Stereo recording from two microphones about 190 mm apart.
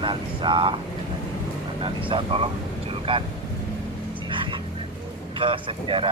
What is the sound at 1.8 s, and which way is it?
Speech, 30° right (ahead or behind).